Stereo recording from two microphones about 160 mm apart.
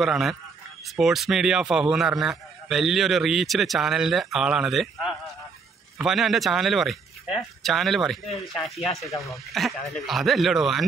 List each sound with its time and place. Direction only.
0.0 s a man's voice: centre (ahead or behind)